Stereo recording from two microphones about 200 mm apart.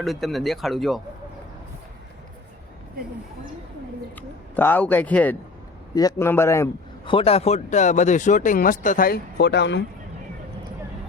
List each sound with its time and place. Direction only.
0.0 s speech: centre (ahead or behind)
4.1 s a man's voice: 10° left (ahead or behind)
5.9 s a man's voice: 20° left (ahead or behind)
7.0 s speech: 25° left (ahead or behind); by 9.8 s 60° left (ahead or behind)